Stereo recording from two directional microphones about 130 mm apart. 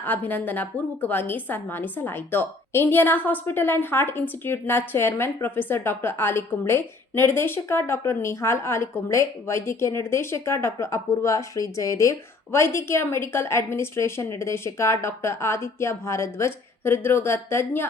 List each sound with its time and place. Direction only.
0.0 s a woman's voice: 15° left (ahead or behind)